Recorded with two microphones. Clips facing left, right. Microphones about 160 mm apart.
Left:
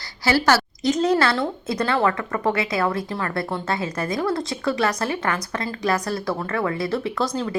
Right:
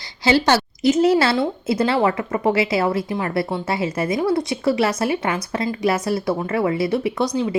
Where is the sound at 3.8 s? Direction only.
25° right (ahead or behind).